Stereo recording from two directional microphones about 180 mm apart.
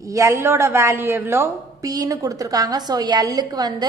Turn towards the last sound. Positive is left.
turn(degrees=-20)  # may be behind; listen again after turning